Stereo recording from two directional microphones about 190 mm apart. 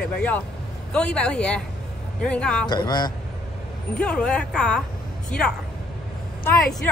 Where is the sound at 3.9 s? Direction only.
5° left (ahead or behind).